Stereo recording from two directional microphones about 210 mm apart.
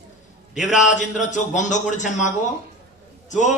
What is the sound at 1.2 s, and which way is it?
A man's voice, 35° left (ahead or behind).